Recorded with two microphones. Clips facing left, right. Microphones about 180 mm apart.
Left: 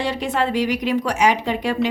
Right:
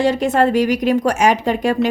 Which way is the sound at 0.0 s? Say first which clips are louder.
Right 7 dB; 45° right (ahead or behind).